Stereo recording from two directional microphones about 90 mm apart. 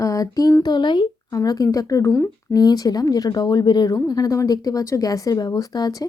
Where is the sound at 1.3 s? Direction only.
45° left (ahead or behind).